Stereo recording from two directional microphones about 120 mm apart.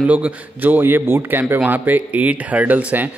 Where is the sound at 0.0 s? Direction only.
10° right (ahead or behind).